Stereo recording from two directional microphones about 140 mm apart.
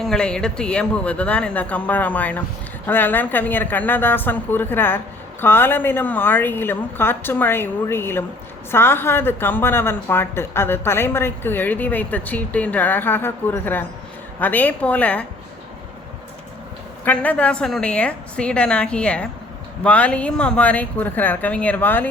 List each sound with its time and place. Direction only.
0.0 s a woman's voice: 5° left (ahead or behind)
17.1 s a woman's voice: 10° left (ahead or behind)